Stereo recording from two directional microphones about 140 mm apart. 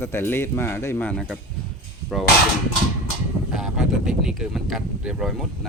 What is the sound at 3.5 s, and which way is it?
Speech, 5° right (ahead or behind).